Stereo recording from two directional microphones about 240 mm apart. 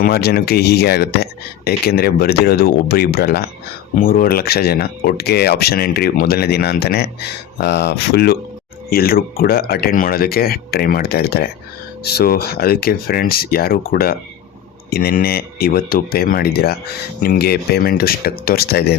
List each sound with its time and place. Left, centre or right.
0.0 s speech: left